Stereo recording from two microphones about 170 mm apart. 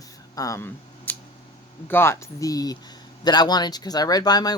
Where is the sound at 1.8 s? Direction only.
15° left (ahead or behind).